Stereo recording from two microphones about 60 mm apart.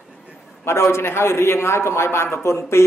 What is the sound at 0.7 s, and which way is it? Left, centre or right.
A man's voice, left.